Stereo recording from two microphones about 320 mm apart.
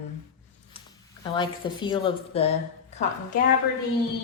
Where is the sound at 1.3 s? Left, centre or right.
Centre.